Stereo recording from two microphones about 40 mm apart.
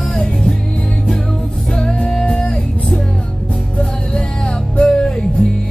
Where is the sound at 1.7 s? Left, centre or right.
Centre.